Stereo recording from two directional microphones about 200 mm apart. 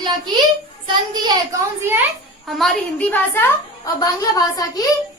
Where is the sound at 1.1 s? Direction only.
20° right (ahead or behind).